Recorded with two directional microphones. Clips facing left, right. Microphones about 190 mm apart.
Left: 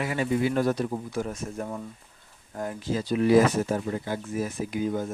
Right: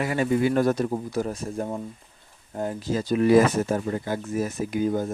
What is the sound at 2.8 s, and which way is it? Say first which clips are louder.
Speech: right 2 dB; 45° right (ahead or behind).